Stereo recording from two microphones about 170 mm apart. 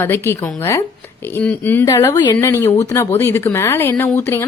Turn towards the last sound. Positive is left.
turn(degrees=15)  # may be behind; listen again after turning